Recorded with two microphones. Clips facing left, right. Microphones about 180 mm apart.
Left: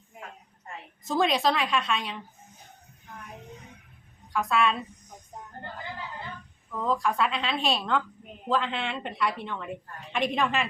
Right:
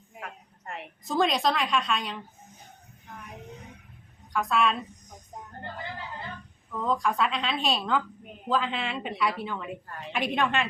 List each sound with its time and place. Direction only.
0.2 s a sound: 75° right (ahead or behind)
1.0 s a woman's voice: centre (ahead or behind)
4.3 s a woman's voice: centre (ahead or behind)
6.7 s a woman's voice: centre (ahead or behind)